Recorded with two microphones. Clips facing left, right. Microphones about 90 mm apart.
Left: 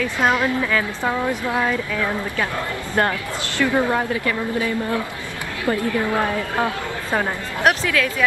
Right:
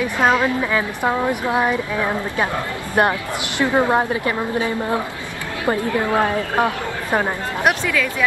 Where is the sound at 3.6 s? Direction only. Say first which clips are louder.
Right 2 dB; 20° right (ahead or behind).